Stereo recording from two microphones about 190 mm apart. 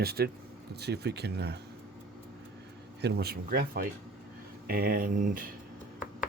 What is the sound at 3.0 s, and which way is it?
Speech, 60° right (ahead or behind).